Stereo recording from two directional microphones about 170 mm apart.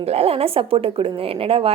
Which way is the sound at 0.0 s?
35° right (ahead or behind).